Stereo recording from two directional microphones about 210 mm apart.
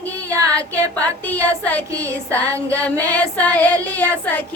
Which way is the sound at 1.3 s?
5° left (ahead or behind).